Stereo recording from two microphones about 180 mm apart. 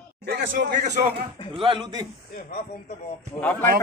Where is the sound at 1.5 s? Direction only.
30° right (ahead or behind).